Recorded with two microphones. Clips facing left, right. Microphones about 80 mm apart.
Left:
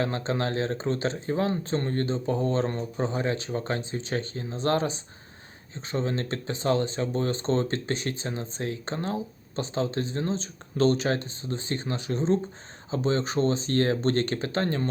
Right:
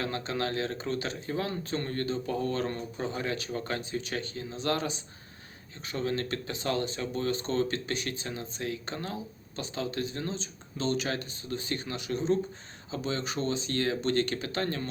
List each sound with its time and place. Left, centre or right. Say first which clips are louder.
0.0 s speech: left 4 dB; left